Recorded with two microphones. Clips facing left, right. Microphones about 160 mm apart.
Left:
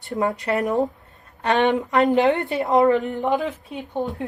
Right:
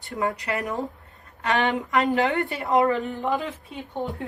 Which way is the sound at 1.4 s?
25° left (ahead or behind).